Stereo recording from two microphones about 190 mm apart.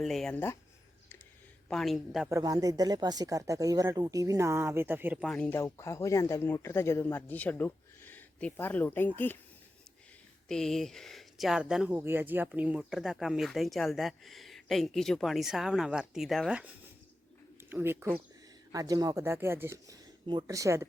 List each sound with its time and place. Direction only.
0.0 s speech: centre (ahead or behind)
1.6 s speech: centre (ahead or behind)
2.3 s speech: 20° right (ahead or behind)
5.2 s speech: 5° left (ahead or behind)
5.5 s speech: 15° left (ahead or behind)
10.5 s speech: 5° left (ahead or behind); by 20.8 s 15° right (ahead or behind)